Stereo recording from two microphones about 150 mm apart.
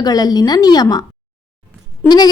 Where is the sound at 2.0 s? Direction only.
25° left (ahead or behind).